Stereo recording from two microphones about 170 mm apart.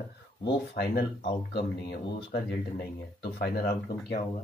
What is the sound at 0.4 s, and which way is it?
Speech, 70° left (ahead or behind).